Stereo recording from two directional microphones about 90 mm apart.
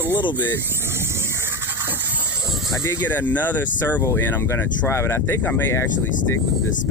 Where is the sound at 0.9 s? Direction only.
30° right (ahead or behind).